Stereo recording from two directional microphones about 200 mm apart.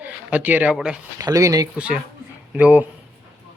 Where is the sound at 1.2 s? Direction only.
15° right (ahead or behind).